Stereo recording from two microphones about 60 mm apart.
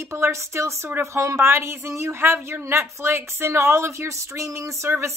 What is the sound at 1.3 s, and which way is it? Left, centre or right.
A woman's voice, right.